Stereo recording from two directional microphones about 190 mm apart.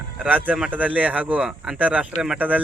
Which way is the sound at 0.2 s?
10° right (ahead or behind).